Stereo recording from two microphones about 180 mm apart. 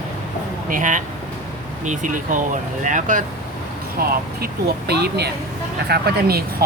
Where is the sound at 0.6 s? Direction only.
45° right (ahead or behind).